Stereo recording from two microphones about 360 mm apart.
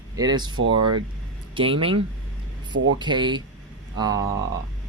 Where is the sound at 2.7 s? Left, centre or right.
Right.